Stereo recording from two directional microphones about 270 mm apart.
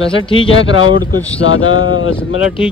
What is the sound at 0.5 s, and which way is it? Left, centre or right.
Speech, left.